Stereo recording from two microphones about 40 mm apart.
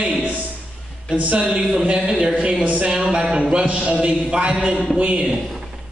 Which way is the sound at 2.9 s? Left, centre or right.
Centre.